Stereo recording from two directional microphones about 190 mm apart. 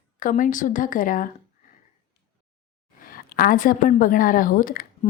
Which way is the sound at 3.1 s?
50° left (ahead or behind).